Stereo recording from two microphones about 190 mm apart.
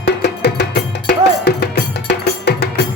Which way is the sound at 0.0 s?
60° left (ahead or behind).